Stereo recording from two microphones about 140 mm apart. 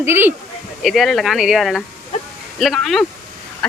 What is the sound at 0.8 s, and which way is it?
Speech, centre (ahead or behind).